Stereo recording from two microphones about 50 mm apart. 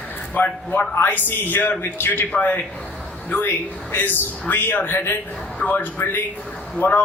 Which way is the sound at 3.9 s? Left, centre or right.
Left.